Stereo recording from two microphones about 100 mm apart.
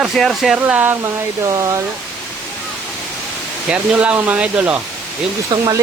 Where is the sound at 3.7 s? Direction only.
10° right (ahead or behind).